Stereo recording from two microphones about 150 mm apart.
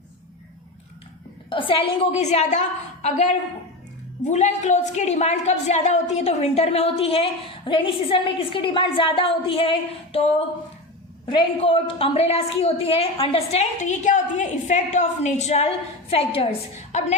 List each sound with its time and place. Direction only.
1.5 s a woman's voice: 35° left (ahead or behind)